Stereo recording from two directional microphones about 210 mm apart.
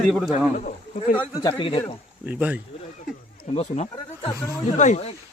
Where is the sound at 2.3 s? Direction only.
5° right (ahead or behind).